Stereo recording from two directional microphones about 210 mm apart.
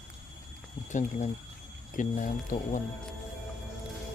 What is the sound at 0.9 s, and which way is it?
Speech, 35° left (ahead or behind).